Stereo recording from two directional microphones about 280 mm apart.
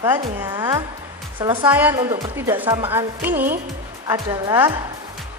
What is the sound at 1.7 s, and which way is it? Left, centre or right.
Speech, centre.